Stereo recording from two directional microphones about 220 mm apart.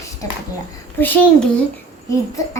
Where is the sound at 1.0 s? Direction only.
10° left (ahead or behind).